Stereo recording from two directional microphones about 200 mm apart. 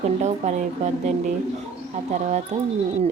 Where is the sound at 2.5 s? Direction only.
35° right (ahead or behind).